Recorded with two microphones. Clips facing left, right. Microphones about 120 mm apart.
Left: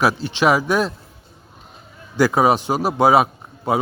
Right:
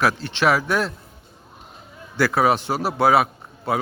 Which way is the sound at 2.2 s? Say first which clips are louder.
Left 3 dB; 15° left (ahead or behind).